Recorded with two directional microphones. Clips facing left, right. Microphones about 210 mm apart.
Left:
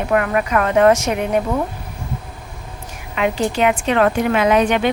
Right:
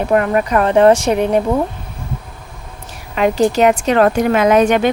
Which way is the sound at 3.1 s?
40° right (ahead or behind).